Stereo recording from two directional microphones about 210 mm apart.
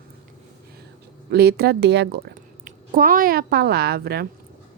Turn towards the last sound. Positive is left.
turn(degrees=-50)  # may be behind; listen again after turning